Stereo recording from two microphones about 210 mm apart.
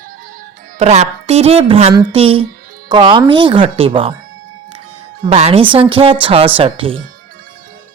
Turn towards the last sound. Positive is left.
turn(degrees=-25)  # may be behind; listen again after turning